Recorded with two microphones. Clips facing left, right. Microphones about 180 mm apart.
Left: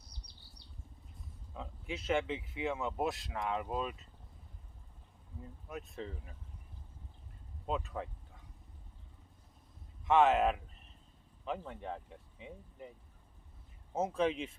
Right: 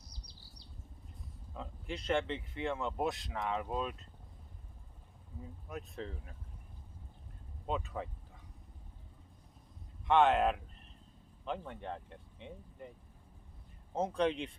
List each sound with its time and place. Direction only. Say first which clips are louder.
0.1 s chirp: right 2 dB; 60° left (ahead or behind)
1.5 s speech: even; centre (ahead or behind)
5.4 s speech: even; centre (ahead or behind)
7.7 s speech: even; centre (ahead or behind)
10.1 s speech: even; centre (ahead or behind)
13.9 s speech: even; 5° left (ahead or behind)